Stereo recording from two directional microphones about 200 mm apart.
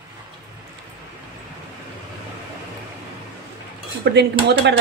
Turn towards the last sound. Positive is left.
turn(degrees=-55)  # may be behind; listen again after turning